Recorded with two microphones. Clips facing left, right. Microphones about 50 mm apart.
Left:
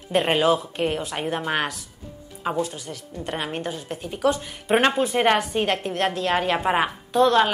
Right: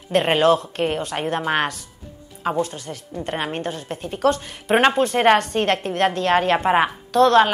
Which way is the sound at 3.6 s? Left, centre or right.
Centre.